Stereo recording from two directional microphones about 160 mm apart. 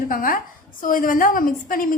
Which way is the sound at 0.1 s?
60° left (ahead or behind).